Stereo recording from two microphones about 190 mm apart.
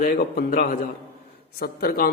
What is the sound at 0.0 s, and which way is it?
A man's voice, 45° left (ahead or behind).